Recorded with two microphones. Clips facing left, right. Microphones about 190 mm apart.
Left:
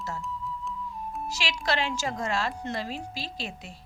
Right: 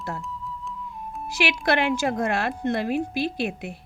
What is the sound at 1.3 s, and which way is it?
A woman's voice, 60° right (ahead or behind).